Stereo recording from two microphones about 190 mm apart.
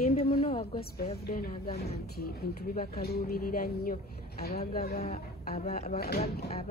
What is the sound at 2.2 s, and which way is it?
Speech, 50° left (ahead or behind).